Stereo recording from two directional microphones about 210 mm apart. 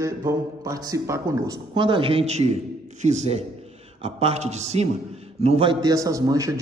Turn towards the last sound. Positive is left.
turn(degrees=-15)  # may be behind; listen again after turning